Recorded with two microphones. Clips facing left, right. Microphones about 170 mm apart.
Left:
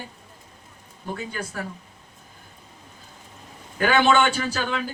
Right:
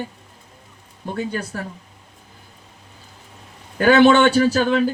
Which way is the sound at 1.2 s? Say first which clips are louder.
Right 9 dB; 35° right (ahead or behind).